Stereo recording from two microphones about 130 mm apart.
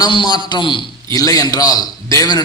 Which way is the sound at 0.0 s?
35° left (ahead or behind).